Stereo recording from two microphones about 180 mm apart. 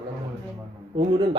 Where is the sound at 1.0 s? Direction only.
25° right (ahead or behind).